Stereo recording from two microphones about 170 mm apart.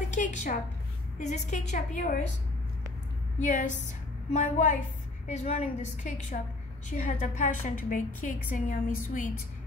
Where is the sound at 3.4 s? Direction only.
45° left (ahead or behind).